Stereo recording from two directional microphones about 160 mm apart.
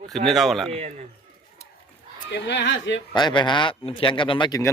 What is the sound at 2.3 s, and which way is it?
Speech, 90° left.